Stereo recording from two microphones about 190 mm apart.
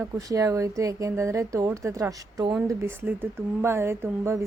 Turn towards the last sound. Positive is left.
turn(degrees=-15)  # may be behind; listen again after turning